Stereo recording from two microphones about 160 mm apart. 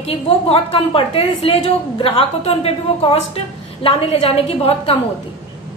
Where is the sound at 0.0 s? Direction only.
40° left (ahead or behind).